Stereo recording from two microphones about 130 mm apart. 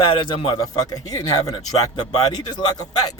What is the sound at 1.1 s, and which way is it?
Speech, 30° left (ahead or behind).